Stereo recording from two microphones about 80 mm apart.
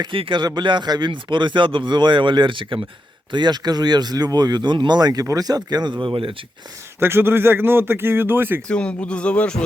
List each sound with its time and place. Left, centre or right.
0.0 s speech: right
3.3 s speech: right
5.2 s speech: right
7.0 s speech: right
8.6 s speech: centre